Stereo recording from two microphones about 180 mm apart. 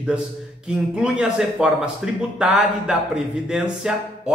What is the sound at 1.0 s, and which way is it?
Speech, 5° right (ahead or behind).